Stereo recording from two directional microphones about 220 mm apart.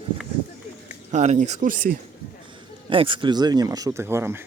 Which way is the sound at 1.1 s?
30° right (ahead or behind).